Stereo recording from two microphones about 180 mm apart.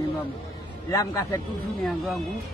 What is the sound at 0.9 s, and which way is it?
Speech, 15° left (ahead or behind).